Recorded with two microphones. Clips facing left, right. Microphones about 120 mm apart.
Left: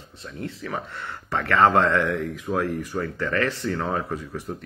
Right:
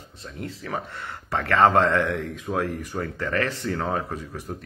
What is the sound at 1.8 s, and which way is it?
Speech, 25° right (ahead or behind).